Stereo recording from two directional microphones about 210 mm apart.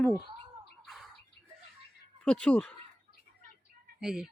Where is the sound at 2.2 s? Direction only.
5° left (ahead or behind).